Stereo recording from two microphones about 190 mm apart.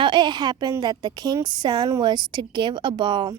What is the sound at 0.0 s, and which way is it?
A woman's voice, 25° right (ahead or behind).